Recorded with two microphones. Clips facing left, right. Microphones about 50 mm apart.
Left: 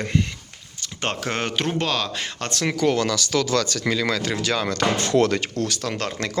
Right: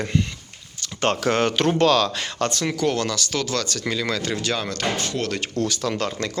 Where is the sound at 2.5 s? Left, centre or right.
Left.